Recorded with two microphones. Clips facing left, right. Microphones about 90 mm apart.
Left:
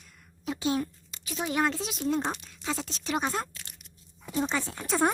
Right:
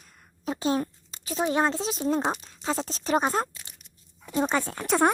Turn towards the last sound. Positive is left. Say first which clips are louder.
# right 4 dB
turn(degrees=-60)  # may be behind; listen again after turning